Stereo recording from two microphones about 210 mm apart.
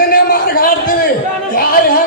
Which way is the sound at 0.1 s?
45° left (ahead or behind).